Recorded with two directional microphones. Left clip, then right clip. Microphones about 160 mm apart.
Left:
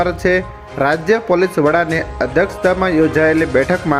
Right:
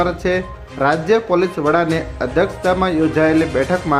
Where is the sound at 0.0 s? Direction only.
25° left (ahead or behind).